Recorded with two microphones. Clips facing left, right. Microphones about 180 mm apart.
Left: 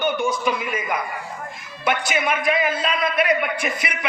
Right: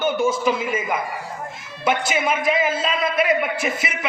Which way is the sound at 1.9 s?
25° right (ahead or behind).